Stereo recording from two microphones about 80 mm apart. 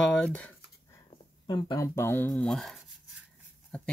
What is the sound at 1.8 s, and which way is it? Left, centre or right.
Speech, left.